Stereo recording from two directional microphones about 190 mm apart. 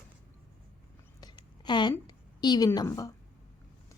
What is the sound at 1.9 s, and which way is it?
A woman's voice, 20° left (ahead or behind).